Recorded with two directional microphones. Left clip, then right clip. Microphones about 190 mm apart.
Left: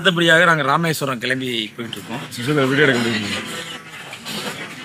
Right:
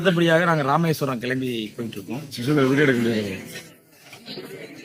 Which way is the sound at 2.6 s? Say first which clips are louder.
Left 3 dB; 25° left (ahead or behind).